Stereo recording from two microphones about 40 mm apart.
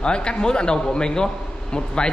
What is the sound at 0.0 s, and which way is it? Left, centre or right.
A man's voice, left.